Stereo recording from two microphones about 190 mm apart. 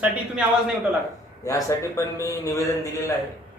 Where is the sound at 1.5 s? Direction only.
15° left (ahead or behind).